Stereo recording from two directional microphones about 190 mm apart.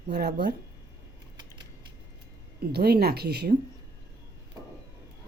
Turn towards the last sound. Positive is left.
turn(degrees=-55)  # may be behind; listen again after turning